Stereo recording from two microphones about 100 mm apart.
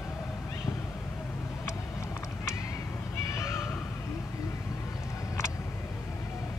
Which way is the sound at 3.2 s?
30° left (ahead or behind).